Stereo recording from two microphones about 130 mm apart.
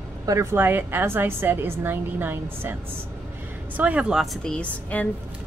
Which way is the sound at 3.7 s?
10° right (ahead or behind).